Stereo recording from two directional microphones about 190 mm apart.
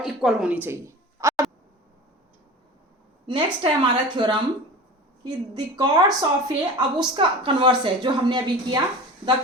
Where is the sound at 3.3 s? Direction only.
25° right (ahead or behind).